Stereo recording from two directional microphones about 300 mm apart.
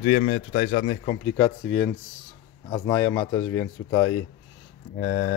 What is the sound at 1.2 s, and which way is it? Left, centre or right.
Speech, centre.